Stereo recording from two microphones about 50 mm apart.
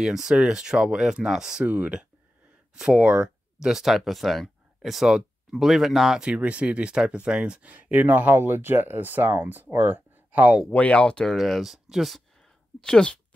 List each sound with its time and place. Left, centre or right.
0.0 s speech: centre
2.7 s speech: centre
3.6 s speech: centre
6.2 s speech: right
7.6 s speech: right
8.5 s speech: right
10.7 s speech: left
11.3 s speech: centre
12.4 s a sound: centre